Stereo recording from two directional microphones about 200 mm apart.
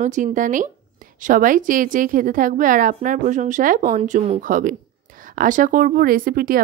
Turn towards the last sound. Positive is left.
turn(degrees=-45)  # may be behind; listen again after turning